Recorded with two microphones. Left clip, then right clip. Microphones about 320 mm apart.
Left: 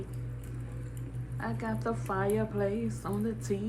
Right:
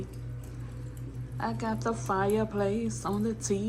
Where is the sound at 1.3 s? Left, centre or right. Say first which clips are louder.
Right 4 dB; centre.